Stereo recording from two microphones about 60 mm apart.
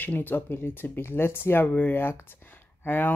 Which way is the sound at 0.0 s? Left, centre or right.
Left.